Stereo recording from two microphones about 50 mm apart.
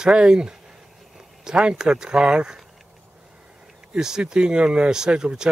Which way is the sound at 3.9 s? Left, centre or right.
Centre.